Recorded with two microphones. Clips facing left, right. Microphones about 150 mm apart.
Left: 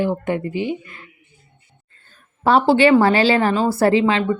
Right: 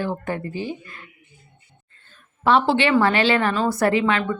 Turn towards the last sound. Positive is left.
turn(degrees=25)  # may be behind; listen again after turning